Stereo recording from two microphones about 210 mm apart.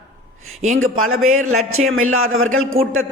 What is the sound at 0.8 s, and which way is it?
A man's voice, 75° right (ahead or behind).